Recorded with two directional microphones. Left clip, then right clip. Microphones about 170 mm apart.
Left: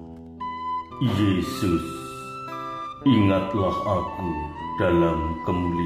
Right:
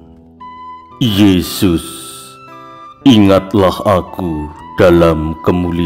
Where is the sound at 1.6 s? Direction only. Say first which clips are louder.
Right 11 dB; 65° right (ahead or behind).